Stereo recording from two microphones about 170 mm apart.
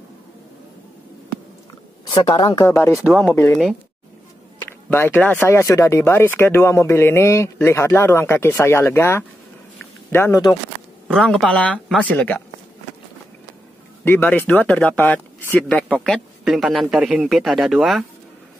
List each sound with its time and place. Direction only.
2.1 s a woman's voice: 30° left (ahead or behind)
2.7 s speech: 15° left (ahead or behind)
3.0 s speech: centre (ahead or behind)
4.8 s speech: 10° left (ahead or behind)
9.8 s a sound: 15° left (ahead or behind)
11.1 s speech: 5° left (ahead or behind)
14.0 s speech: 10° left (ahead or behind)